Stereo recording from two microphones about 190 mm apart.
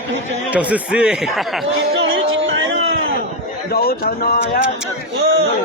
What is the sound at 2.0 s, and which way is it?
Music, 90° right.